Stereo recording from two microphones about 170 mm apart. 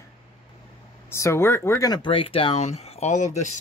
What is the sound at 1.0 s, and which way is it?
Speech, 15° left (ahead or behind).